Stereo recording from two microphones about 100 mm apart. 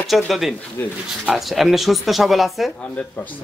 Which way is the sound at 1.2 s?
5° right (ahead or behind).